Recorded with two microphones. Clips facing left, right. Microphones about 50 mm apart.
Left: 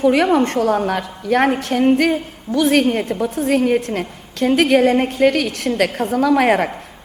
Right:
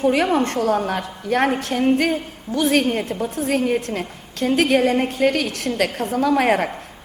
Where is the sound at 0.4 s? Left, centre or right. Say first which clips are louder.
Left 3 dB; left.